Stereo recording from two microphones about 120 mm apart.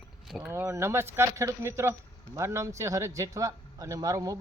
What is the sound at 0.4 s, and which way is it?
Speech, 20° right (ahead or behind).